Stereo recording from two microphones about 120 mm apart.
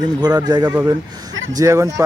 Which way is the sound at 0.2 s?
35° right (ahead or behind).